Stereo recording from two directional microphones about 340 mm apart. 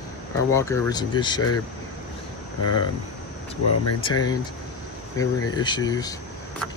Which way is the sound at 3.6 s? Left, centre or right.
Left.